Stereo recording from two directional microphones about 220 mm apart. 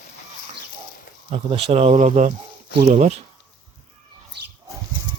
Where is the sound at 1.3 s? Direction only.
25° right (ahead or behind).